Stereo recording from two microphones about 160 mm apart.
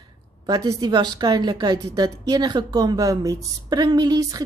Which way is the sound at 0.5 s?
25° right (ahead or behind).